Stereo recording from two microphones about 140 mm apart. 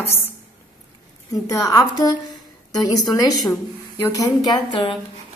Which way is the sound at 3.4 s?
20° left (ahead or behind).